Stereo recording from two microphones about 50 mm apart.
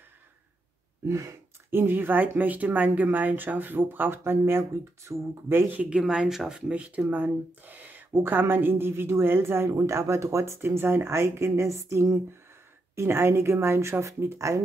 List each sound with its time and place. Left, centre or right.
1.0 s speech: right
1.7 s speech: right
5.1 s speech: right
5.7 s speech: right
5.9 s speech: centre
6.7 s speech: right
9.7 s speech: right
10.6 s speech: right
12.9 s speech: right